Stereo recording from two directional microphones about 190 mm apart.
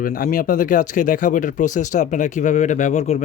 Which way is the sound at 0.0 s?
50° left (ahead or behind).